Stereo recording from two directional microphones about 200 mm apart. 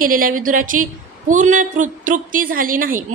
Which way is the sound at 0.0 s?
45° right (ahead or behind).